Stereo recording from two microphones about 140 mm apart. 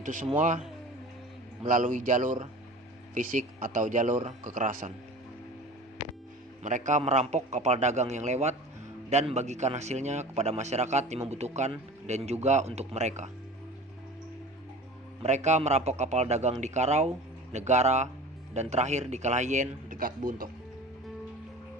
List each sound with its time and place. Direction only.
0.0 s a man's voice: 70° right (ahead or behind)
1.6 s speech: 70° right (ahead or behind)
6.6 s a man's voice: 60° right (ahead or behind)
15.2 s a man's voice: 55° right (ahead or behind); by 20.5 s 90° right